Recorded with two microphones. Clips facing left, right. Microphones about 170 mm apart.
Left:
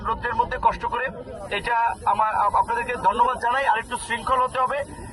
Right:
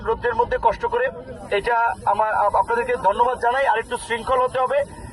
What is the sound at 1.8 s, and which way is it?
A man's voice, 40° right (ahead or behind).